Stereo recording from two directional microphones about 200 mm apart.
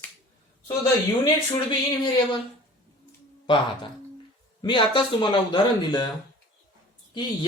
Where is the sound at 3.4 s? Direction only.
25° left (ahead or behind).